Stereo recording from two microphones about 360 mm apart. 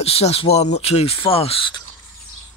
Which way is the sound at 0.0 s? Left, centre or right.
Centre.